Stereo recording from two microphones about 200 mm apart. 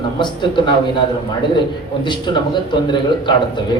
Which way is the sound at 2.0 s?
25° left (ahead or behind).